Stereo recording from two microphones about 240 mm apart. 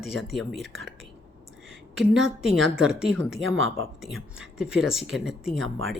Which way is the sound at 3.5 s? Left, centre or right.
Right.